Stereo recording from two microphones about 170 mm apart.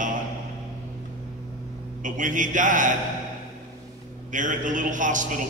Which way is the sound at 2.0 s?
50° right (ahead or behind).